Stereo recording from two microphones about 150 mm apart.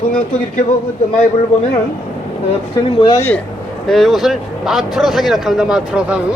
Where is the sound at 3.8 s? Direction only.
Centre (ahead or behind).